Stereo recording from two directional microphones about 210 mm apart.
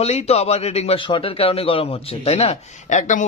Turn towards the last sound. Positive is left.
turn(degrees=35)  # may be behind; listen again after turning